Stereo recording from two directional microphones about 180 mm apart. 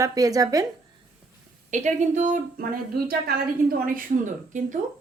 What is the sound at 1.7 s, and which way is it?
A woman's voice, 40° right (ahead or behind).